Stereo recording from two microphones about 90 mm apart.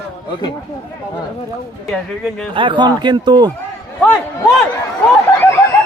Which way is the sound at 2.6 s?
65° right (ahead or behind).